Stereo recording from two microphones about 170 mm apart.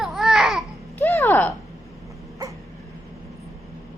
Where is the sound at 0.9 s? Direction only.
10° left (ahead or behind).